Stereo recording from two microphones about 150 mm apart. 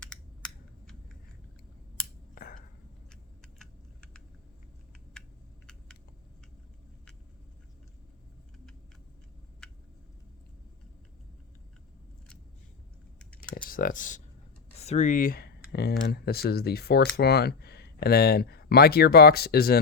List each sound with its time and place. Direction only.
0.0 s computer keyboard: 5° left (ahead or behind)
2.3 s finger snapping: 75° left (ahead or behind)
3.6 s typing: 5° left (ahead or behind)
13.1 s computer keyboard: 5° left (ahead or behind)
13.7 s speech: 70° left (ahead or behind)
14.8 s speech: 50° left (ahead or behind); by 19.8 s 90° left